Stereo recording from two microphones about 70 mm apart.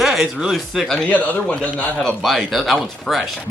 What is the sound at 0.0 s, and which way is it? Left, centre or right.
Speech, centre.